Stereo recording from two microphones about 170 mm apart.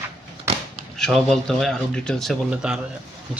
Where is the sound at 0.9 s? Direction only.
Centre (ahead or behind).